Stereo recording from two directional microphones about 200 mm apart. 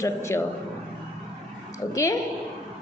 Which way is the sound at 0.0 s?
15° left (ahead or behind).